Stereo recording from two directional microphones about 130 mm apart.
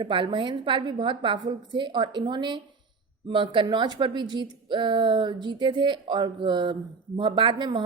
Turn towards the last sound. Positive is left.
turn(degrees=-40)  # may be behind; listen again after turning